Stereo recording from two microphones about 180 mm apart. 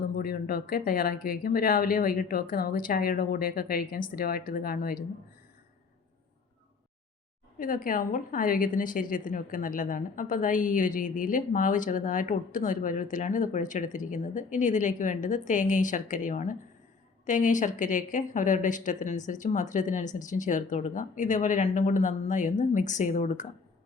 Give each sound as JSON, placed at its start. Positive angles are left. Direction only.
{"t": 0.2, "sound": "speech", "side_deg": 55}
{"t": 7.6, "sound": "a woman's voice", "side_deg": 50}